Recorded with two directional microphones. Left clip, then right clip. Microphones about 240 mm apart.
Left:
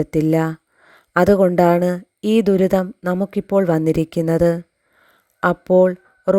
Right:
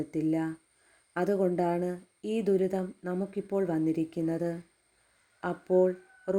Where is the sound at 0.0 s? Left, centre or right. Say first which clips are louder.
Left 13 dB; left.